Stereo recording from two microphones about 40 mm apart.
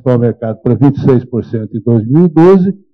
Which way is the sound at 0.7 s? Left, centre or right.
Right.